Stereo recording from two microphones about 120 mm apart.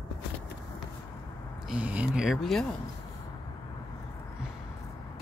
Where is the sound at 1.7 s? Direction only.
10° right (ahead or behind).